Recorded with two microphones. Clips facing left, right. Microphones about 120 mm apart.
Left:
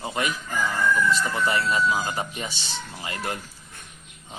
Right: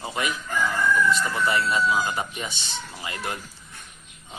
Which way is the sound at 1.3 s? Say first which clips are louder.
Even; 35° left (ahead or behind).